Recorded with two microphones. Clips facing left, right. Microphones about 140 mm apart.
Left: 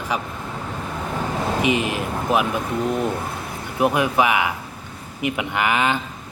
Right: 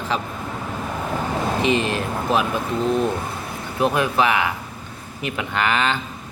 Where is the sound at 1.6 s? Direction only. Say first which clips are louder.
Right 1 dB; 15° left (ahead or behind).